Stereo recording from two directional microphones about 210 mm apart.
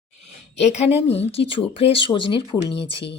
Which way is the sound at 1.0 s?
30° left (ahead or behind).